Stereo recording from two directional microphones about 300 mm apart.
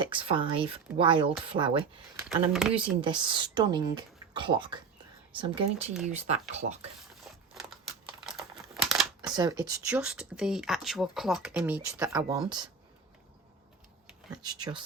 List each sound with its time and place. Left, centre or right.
0.0 s speech: centre
2.5 s speech: centre
3.0 s speech: centre
7.3 s crumpling: centre
9.2 s speech: centre
14.3 s speech: centre